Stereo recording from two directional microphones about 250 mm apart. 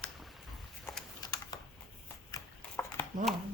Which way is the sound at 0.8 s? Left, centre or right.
Centre.